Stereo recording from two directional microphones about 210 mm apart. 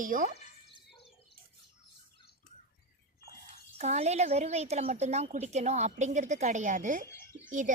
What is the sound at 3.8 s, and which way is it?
Speech, 30° right (ahead or behind).